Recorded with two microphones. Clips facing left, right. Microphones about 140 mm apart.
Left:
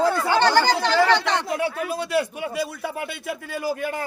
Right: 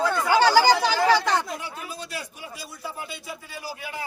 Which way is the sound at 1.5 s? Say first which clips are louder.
Left 10 dB; 65° left (ahead or behind).